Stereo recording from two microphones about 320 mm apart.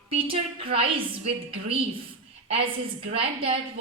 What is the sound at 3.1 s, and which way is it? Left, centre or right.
Speech, centre.